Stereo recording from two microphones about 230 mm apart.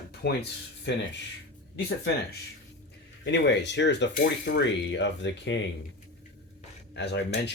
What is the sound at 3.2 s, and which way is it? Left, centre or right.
Speech, left.